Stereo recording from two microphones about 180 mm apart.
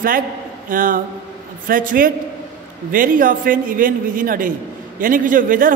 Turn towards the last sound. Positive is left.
turn(degrees=-50)  # may be behind; listen again after turning